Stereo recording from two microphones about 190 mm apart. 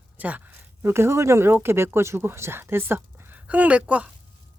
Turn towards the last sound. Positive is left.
turn(degrees=-5)  # may be behind; listen again after turning